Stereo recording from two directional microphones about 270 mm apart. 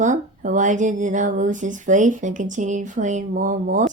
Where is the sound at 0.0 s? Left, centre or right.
Right.